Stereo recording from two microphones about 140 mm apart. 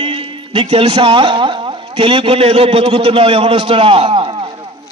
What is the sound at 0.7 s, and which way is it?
A man's voice, 45° right (ahead or behind).